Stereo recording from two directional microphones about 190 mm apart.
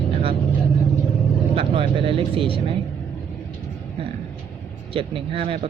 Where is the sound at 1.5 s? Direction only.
25° right (ahead or behind).